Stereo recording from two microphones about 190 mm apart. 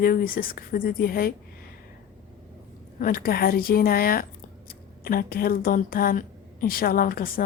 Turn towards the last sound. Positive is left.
turn(degrees=50)  # may be behind; listen again after turning